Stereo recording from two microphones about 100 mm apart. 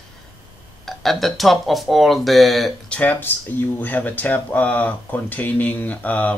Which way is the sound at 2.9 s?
15° left (ahead or behind).